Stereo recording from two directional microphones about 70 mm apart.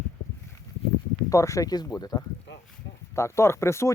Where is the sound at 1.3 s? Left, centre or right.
Left.